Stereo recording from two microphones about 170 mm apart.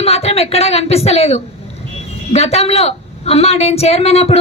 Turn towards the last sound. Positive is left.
turn(degrees=35)  # may be behind; listen again after turning